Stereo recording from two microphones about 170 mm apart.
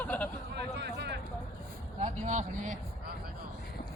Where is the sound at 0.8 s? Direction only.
80° right.